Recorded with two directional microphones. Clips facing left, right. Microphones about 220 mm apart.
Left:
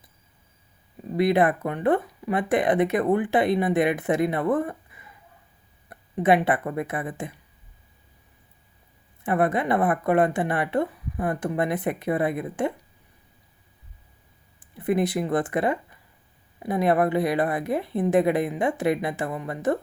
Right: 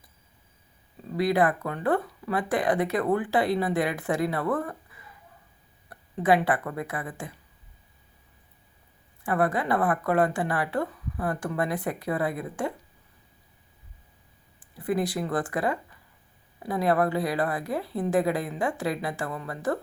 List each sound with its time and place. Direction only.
1.1 s speech: 20° left (ahead or behind)
9.2 s speech: 20° left (ahead or behind)
14.6 s speech: 20° left (ahead or behind)